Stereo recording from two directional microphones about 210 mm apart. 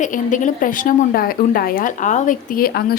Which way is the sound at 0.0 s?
35° left (ahead or behind).